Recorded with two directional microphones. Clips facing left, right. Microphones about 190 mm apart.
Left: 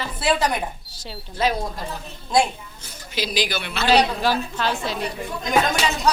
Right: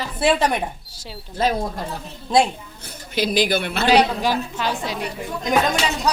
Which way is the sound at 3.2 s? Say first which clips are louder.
Right 6 dB; 55° right (ahead or behind).